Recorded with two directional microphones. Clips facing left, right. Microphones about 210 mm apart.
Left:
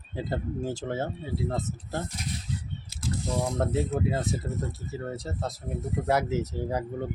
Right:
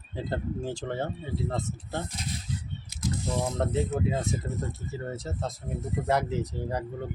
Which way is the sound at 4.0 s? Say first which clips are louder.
Left 1 dB; 5° left (ahead or behind).